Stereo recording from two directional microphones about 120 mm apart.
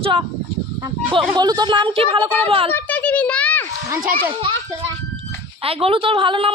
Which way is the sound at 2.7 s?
15° left (ahead or behind).